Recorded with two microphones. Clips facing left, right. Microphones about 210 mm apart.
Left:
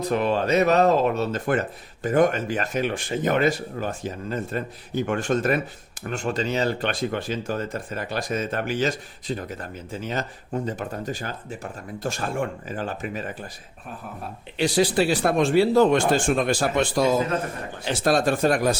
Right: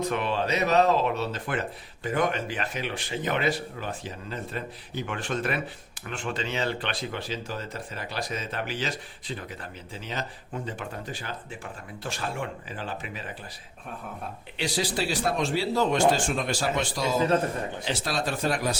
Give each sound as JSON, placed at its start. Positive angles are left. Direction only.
{"t": 0.0, "sound": "speech", "side_deg": 40}
{"t": 14.6, "sound": "speech", "side_deg": 55}